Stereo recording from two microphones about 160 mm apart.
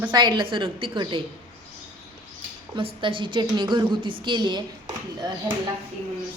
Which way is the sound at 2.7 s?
30° right (ahead or behind).